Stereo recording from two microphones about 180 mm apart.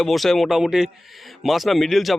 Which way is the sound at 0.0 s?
Centre (ahead or behind).